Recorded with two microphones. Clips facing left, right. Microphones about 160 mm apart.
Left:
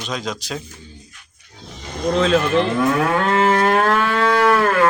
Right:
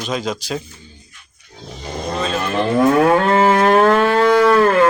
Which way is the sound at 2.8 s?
35° right (ahead or behind).